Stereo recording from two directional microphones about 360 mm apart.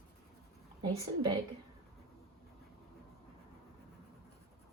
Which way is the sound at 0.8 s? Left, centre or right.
Centre.